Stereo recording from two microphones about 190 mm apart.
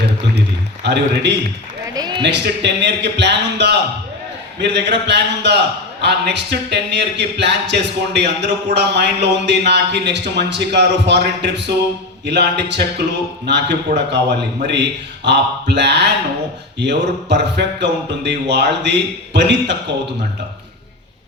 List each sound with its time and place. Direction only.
0.0 s a man's voice: 60° right (ahead or behind)
1.9 s a sound: 20° right (ahead or behind)
2.2 s speech: 65° right (ahead or behind)